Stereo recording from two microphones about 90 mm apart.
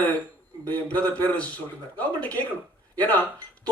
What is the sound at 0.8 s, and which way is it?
A man's voice, 15° left (ahead or behind).